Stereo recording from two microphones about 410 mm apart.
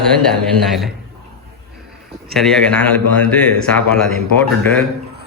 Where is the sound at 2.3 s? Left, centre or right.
Centre.